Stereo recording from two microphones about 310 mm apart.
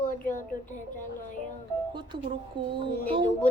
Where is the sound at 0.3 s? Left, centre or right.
Left.